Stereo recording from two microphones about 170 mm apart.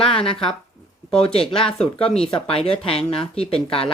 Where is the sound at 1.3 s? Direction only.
35° left (ahead or behind).